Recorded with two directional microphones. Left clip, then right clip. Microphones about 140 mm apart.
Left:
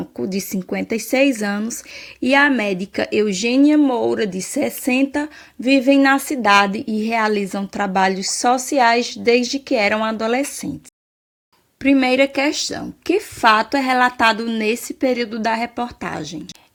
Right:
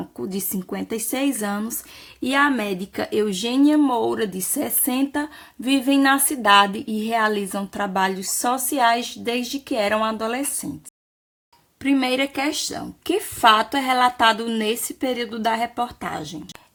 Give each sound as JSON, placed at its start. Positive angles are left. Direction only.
{"t": 0.2, "sound": "speech", "side_deg": 25}
{"t": 6.7, "sound": "a woman's voice", "side_deg": 75}
{"t": 7.0, "sound": "speech", "side_deg": 25}
{"t": 11.8, "sound": "speech", "side_deg": 25}